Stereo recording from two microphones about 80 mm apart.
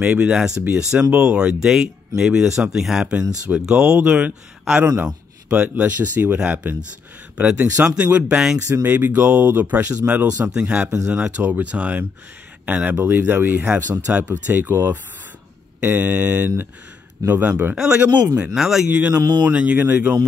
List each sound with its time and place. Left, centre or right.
0.0 s speech: centre
17.7 s speech: centre
18.9 s speech: centre
19.1 s speech: right
19.4 s speech: centre